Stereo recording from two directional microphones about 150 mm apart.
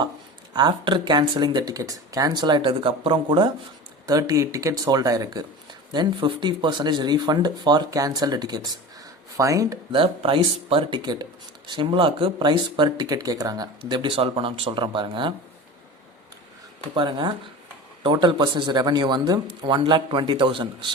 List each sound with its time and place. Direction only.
0.5 s speech: 30° right (ahead or behind)
9.9 s speech: 35° right (ahead or behind)
16.9 s speech: 30° right (ahead or behind)